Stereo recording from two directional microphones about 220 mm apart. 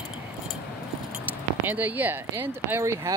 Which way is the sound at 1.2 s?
10° right (ahead or behind).